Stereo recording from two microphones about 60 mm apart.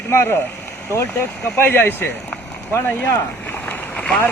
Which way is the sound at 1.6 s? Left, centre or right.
Left.